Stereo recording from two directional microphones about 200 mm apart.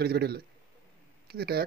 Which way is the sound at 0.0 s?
50° right (ahead or behind).